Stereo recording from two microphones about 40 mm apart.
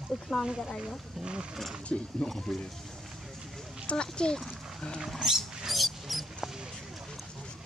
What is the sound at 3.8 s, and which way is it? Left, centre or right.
Speech, left.